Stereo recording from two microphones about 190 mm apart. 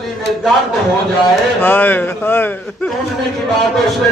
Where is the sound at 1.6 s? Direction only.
10° left (ahead or behind).